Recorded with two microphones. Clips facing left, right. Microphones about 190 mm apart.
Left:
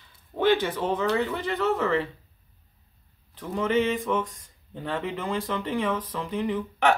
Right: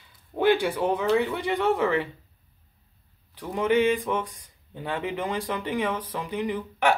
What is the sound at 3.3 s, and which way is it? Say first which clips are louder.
Speech: right 2 dB; 10° right (ahead or behind).